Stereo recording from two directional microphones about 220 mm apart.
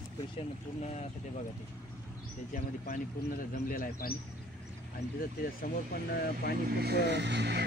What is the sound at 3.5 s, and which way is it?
Speech, 40° left (ahead or behind).